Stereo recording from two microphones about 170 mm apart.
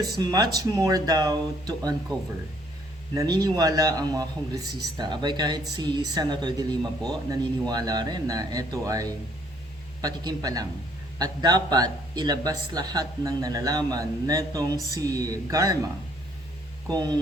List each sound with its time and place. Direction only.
0.0 s a man's voice: 25° right (ahead or behind)
3.2 s a man's voice: 25° right (ahead or behind)
16.9 s a man's voice: 25° right (ahead or behind)